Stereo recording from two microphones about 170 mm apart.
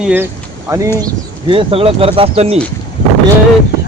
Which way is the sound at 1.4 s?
35° right (ahead or behind).